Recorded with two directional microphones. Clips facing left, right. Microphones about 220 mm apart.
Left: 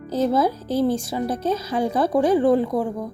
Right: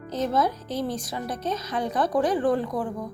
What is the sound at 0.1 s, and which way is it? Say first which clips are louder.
A woman's voice: left 5 dB; 30° left (ahead or behind).